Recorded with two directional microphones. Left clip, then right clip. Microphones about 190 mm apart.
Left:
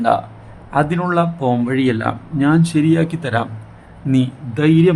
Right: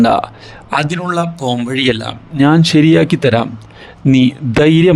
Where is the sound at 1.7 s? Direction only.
50° right (ahead or behind).